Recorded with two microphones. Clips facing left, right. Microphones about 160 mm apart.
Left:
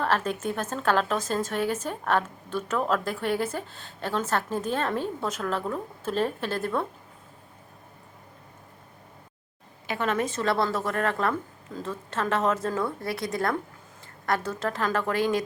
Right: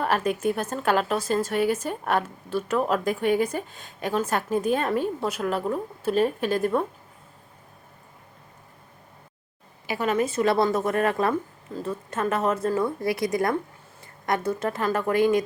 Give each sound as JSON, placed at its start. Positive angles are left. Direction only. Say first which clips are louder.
{"t": 0.0, "sound": "a woman's voice", "louder": "right 3 dB", "side_deg": -10}
{"t": 9.8, "sound": "a woman's voice", "louder": "right 3 dB", "side_deg": -5}
{"t": 10.4, "sound": "a woman's voice", "louder": "right 5 dB", "side_deg": -20}
{"t": 11.7, "sound": "a woman's voice", "louder": "right 3 dB", "side_deg": -10}
{"t": 14.0, "sound": "a woman's voice", "louder": "right 2 dB", "side_deg": -15}